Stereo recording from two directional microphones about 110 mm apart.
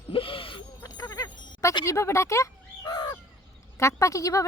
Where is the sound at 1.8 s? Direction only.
25° left (ahead or behind).